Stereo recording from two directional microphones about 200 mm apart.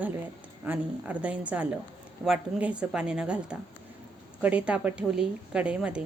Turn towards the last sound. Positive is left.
turn(degrees=-5)  # may be behind; listen again after turning